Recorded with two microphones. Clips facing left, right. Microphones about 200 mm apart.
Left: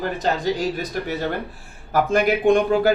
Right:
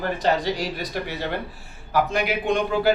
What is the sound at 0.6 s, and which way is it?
A man's voice, 45° left (ahead or behind).